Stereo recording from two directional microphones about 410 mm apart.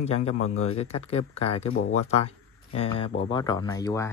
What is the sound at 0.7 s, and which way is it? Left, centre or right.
Speech, centre.